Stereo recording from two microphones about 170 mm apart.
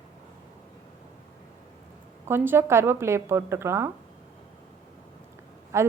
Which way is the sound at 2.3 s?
15° right (ahead or behind).